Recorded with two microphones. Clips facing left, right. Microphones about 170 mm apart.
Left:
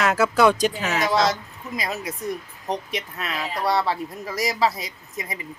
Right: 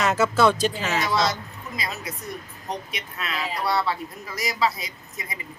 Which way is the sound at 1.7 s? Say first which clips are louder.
Left 4 dB; 50° left (ahead or behind).